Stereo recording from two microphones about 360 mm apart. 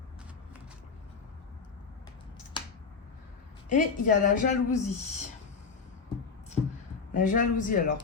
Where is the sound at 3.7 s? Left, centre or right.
Left.